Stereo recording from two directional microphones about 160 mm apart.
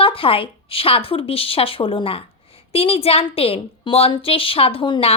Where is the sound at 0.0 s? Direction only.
35° left (ahead or behind).